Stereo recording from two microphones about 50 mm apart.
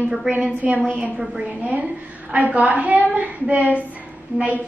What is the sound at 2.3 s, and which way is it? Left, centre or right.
A woman's voice, right.